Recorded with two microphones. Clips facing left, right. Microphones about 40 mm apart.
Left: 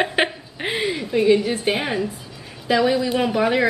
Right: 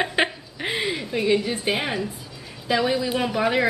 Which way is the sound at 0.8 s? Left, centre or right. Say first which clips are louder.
Left 5 dB; centre.